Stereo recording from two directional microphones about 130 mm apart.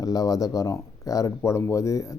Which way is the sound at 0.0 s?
30° left (ahead or behind).